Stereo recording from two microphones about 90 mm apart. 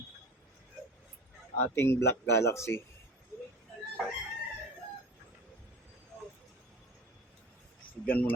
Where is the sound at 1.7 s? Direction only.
30° left (ahead or behind).